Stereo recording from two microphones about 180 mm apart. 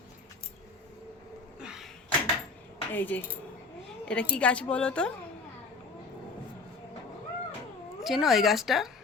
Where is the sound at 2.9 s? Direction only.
10° left (ahead or behind).